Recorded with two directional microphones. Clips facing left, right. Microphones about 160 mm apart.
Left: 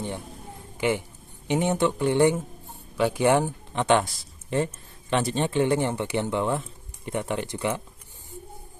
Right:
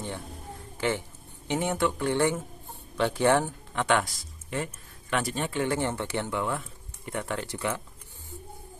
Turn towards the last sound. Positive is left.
turn(degrees=20)  # may be behind; listen again after turning